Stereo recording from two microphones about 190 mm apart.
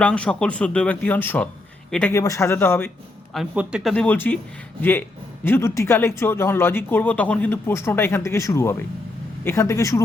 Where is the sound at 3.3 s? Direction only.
5° right (ahead or behind).